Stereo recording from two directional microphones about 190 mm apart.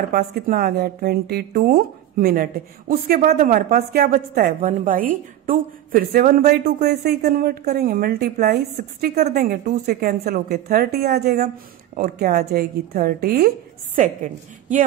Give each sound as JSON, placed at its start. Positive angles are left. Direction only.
{"t": 0.1, "sound": "a woman's voice", "side_deg": -50}
{"t": 13.9, "sound": "a woman's voice", "side_deg": -40}